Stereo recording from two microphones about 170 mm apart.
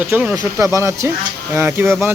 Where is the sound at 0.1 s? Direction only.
10° right (ahead or behind).